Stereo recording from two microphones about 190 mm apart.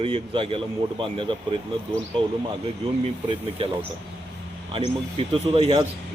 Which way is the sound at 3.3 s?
30° right (ahead or behind).